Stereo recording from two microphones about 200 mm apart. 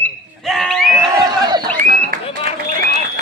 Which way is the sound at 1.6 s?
45° right (ahead or behind).